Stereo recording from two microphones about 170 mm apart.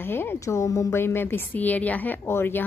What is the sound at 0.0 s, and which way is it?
A woman's voice, 15° left (ahead or behind).